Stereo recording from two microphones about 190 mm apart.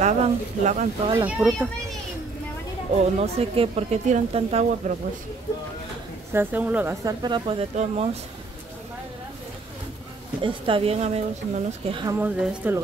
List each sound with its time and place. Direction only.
0.0 s speech: 40° right (ahead or behind)
1.2 s speech: 10° right (ahead or behind)
3.2 s speech: 30° right (ahead or behind)
6.3 s speech: 10° right (ahead or behind); by 8.2 s 35° right (ahead or behind)
10.4 s speech: 30° right (ahead or behind)
12.2 s speech: 10° right (ahead or behind)